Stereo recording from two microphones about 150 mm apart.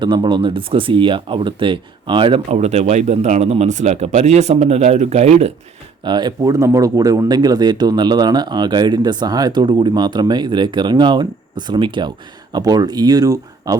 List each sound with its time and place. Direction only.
0.0 s speech: 30° right (ahead or behind)
2.5 s speech: 45° right (ahead or behind)
6.1 s speech: 30° right (ahead or behind)